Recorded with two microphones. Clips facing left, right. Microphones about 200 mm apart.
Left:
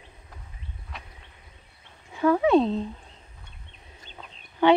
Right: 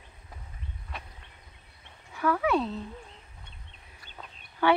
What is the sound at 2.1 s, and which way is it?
Speech, 25° left (ahead or behind).